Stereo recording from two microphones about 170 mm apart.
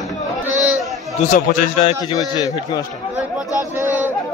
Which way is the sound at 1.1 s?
50° left (ahead or behind).